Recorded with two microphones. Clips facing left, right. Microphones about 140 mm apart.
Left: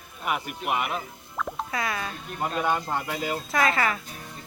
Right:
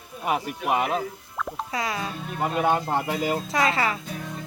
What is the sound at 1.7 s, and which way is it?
Speech, 25° right (ahead or behind).